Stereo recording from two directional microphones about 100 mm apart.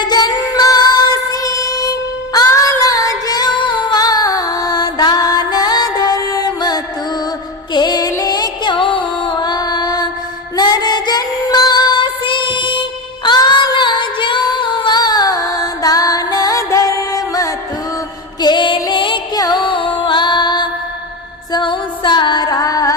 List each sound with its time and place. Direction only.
0.0 s emergency vehicle: 45° left (ahead or behind)
7.7 s music: 45° left (ahead or behind)
10.6 s child singing: 45° left (ahead or behind)
13.2 s music: 50° left (ahead or behind)
18.4 s music: 55° left (ahead or behind)
19.4 s music: 45° left (ahead or behind)